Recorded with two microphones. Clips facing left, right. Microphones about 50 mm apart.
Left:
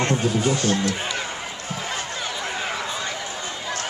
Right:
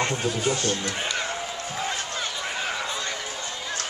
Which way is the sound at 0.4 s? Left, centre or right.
Centre.